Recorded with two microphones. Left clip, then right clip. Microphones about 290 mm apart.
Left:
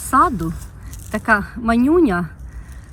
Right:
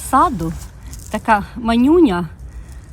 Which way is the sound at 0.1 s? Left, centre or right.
Right.